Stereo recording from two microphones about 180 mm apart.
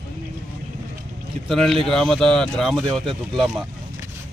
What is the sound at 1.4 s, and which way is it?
Speech, centre (ahead or behind).